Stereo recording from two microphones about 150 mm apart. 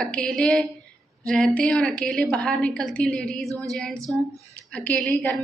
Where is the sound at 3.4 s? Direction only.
20° right (ahead or behind).